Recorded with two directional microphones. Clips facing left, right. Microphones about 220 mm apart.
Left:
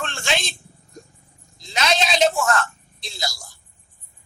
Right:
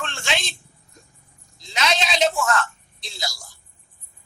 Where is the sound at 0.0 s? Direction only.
40° left (ahead or behind).